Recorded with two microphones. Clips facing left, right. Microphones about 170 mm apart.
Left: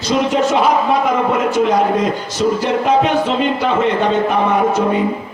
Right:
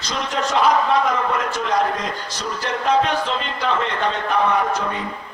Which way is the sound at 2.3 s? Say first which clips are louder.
Left 12 dB; 5° left (ahead or behind).